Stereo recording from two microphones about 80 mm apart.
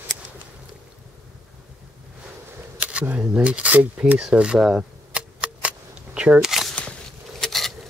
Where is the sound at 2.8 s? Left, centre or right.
Centre.